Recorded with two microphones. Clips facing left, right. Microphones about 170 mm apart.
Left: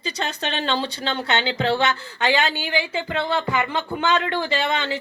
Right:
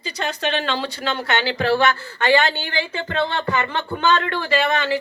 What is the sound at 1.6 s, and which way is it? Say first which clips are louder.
Speech: right 3 dB; 20° left (ahead or behind).